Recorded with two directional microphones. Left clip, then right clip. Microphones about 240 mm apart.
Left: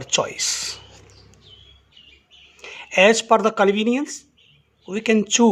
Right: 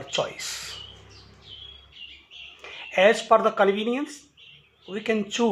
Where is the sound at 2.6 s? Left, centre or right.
Left.